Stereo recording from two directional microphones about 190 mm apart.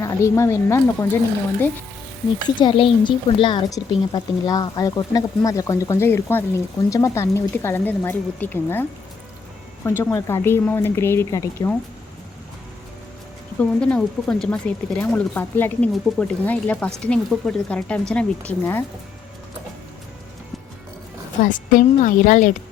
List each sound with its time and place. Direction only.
0.0 s speech: 15° left (ahead or behind)
2.6 s speech: 25° left (ahead or behind); by 8.9 s 10° left (ahead or behind)
10.0 s speech: 15° left (ahead or behind)
13.6 s speech: 5° left (ahead or behind)
21.4 s a woman's voice: 45° left (ahead or behind)